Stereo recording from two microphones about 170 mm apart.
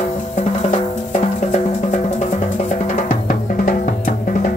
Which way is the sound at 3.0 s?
50° left (ahead or behind).